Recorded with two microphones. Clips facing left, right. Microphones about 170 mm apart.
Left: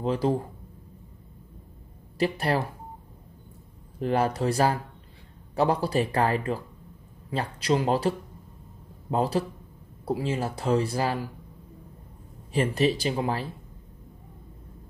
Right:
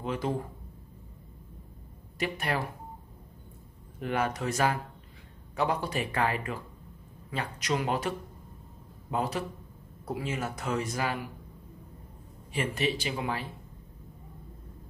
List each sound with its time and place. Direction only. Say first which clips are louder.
0.0 s speech: left 6 dB; 35° left (ahead or behind)
2.1 s speech: left 6 dB; 35° left (ahead or behind)
4.0 s speech: left 5 dB; 35° left (ahead or behind)
9.1 s speech: left 6 dB; 30° left (ahead or behind)
12.5 s speech: left 6 dB; 35° left (ahead or behind)